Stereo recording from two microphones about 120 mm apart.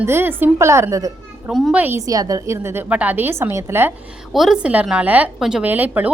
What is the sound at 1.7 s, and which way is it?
Speech, 15° right (ahead or behind).